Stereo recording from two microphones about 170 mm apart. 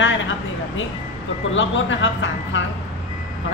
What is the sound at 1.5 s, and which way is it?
Speech, 90° left.